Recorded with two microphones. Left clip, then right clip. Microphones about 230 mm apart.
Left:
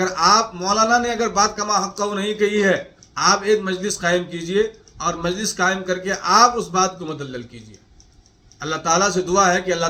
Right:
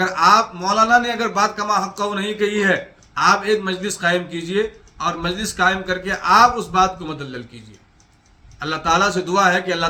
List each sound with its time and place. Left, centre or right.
0.0 s a man's voice: centre
8.5 s a man's voice: centre